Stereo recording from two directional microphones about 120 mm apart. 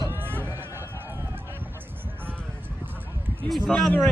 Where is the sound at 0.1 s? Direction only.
20° right (ahead or behind).